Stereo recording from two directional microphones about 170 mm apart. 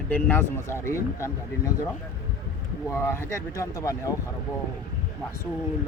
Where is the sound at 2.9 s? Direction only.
15° left (ahead or behind).